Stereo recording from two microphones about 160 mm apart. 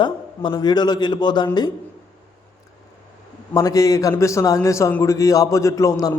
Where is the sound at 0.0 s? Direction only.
30° left (ahead or behind).